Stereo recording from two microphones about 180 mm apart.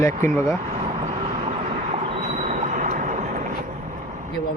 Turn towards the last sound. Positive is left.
turn(degrees=-40)  # may be behind; listen again after turning